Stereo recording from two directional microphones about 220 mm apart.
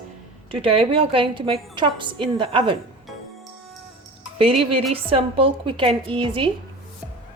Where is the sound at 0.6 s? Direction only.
25° right (ahead or behind).